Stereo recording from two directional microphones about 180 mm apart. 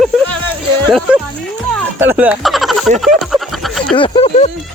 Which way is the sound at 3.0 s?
Centre (ahead or behind).